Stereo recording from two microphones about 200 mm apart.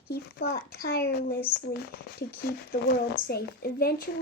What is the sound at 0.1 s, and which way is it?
A child's voice, 55° left (ahead or behind).